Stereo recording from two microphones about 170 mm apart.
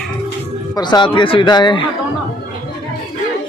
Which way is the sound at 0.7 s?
25° left (ahead or behind).